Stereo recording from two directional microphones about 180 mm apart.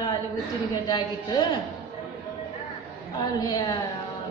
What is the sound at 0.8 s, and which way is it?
Chant, 25° left (ahead or behind).